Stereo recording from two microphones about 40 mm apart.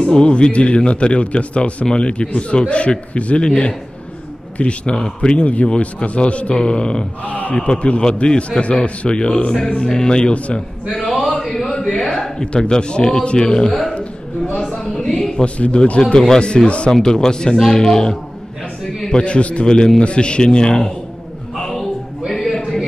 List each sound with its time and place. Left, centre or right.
0.0 s a man's voice: left
7.2 s a man's voice: left
7.5 s speech: left
11.3 s a sound: centre
11.9 s speech: centre
15.0 s a sound: centre
15.4 s a man's voice: left
16.0 s speech: centre
16.9 s speech: centre
19.2 s speech: left
19.6 s speech: centre
21.5 s a sound: centre